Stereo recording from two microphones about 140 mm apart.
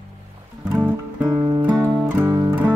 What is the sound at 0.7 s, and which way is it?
Music, 20° right (ahead or behind).